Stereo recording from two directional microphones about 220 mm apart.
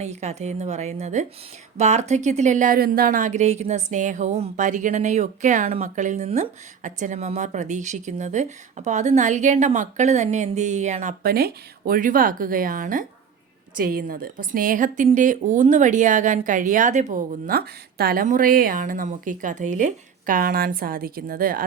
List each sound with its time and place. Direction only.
0.0 s a woman's voice: 30° right (ahead or behind)
11.2 s a woman's voice: 45° right (ahead or behind)